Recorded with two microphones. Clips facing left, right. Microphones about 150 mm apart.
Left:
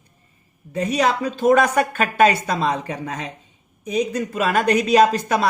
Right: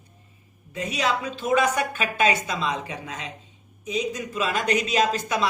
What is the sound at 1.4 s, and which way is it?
Speech, 55° left (ahead or behind).